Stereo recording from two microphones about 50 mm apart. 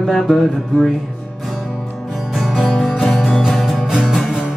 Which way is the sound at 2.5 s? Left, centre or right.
Centre.